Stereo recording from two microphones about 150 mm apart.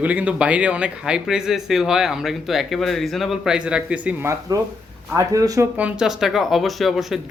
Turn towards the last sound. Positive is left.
turn(degrees=0)  # may be behind; listen again after turning